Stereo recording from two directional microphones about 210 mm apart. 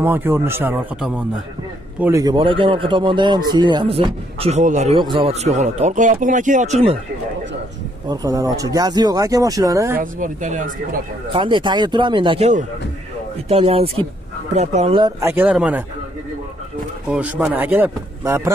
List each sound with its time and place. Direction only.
0.0 s speech: 10° right (ahead or behind); by 7.0 s 30° right (ahead or behind)
8.1 s speech: 15° right (ahead or behind)
9.9 s speech: 40° right (ahead or behind)
11.3 s speech: 20° right (ahead or behind); by 15.8 s 5° right (ahead or behind)
17.1 s speech: 5° right (ahead or behind)